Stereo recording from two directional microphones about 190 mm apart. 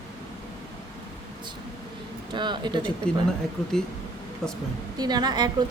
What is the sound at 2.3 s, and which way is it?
Speech, 25° right (ahead or behind).